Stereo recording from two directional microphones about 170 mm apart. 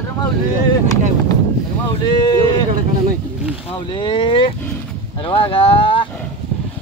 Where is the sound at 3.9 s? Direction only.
30° left (ahead or behind).